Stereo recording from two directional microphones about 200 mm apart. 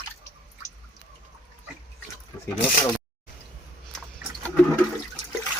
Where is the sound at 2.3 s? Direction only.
20° left (ahead or behind).